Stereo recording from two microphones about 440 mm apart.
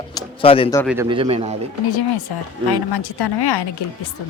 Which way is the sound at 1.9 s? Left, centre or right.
Left.